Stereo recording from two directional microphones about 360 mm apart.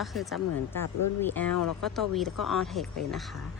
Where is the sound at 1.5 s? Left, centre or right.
Left.